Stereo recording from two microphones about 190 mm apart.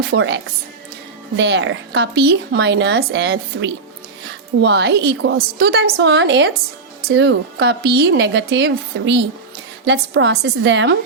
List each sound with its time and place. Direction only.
0.1 s speech: 65° right (ahead or behind)
1.4 s speech: 70° right (ahead or behind)